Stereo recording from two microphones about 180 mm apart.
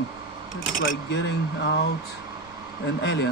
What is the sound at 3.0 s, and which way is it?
Speech, 70° left (ahead or behind).